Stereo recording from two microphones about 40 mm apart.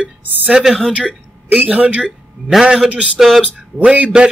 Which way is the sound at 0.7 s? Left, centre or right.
Centre.